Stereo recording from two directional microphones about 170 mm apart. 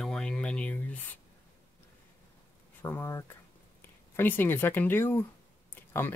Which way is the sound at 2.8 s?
15° left (ahead or behind).